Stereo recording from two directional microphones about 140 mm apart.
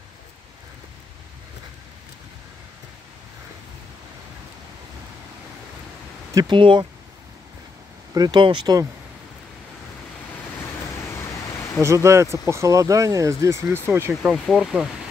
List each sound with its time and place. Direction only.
6.3 s speech: 35° right (ahead or behind)
8.1 s speech: 30° right (ahead or behind)
11.8 s speech: 20° right (ahead or behind)
14.3 s speech: 5° right (ahead or behind)